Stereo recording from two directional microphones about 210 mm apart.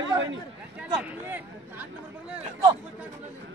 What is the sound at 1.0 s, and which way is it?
Speech, 10° right (ahead or behind).